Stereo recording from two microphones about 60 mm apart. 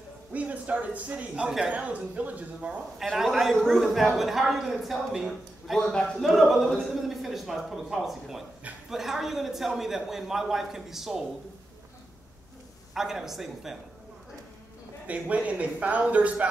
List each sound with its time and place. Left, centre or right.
0.3 s speech: right
3.0 s a man's voice: centre
5.8 s a man's voice: centre
6.2 s a man's voice: centre
12.9 s a woman's voice: centre
15.0 s speech: right